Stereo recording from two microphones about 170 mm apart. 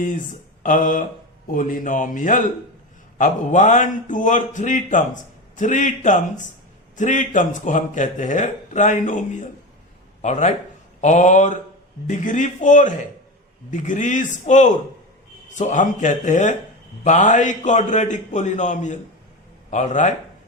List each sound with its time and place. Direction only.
0.6 s a man's voice: 50° left (ahead or behind)